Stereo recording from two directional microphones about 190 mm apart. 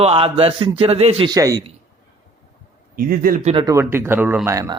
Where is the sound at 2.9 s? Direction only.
50° right (ahead or behind).